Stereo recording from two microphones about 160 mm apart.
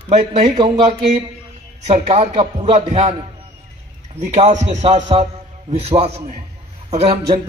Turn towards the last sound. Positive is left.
turn(degrees=-40)  # may be behind; listen again after turning